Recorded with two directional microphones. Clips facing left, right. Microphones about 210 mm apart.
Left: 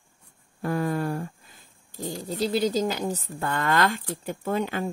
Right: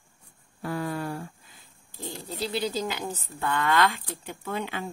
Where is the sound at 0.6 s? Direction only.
45° left (ahead or behind).